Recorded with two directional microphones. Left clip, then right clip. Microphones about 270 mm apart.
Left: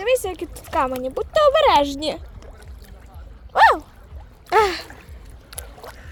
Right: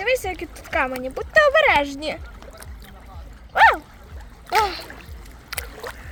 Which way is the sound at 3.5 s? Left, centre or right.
Centre.